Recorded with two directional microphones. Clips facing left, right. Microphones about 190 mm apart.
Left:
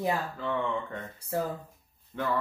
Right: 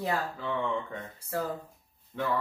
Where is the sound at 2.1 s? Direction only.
Centre (ahead or behind).